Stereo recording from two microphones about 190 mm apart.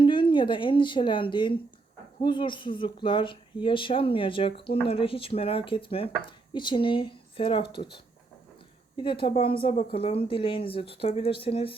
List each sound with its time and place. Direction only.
0.0 s a woman's voice: 25° left (ahead or behind)